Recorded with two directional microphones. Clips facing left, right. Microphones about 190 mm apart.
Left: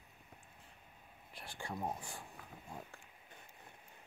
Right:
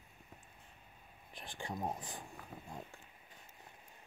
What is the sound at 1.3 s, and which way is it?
Speech, 20° right (ahead or behind).